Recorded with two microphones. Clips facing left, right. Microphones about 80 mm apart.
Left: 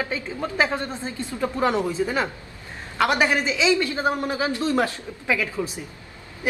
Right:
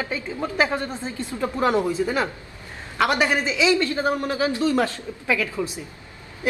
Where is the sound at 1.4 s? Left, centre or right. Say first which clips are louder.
Right 1 dB; centre.